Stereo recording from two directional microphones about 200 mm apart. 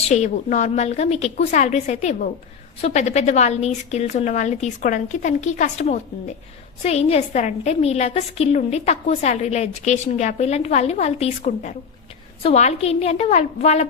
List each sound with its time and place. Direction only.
0.1 s a woman's voice: 35° left (ahead or behind)